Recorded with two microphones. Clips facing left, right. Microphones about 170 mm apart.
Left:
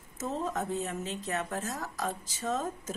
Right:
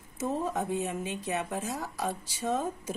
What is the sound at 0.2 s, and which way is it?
Speech, 10° right (ahead or behind).